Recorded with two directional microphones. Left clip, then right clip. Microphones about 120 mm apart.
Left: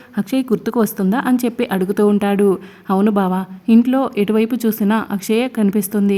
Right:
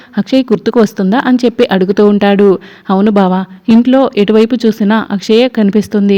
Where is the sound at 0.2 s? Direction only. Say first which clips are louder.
Right 8 dB; 30° right (ahead or behind).